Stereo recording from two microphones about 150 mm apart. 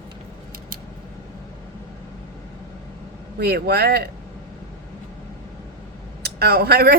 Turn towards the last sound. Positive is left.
turn(degrees=-90)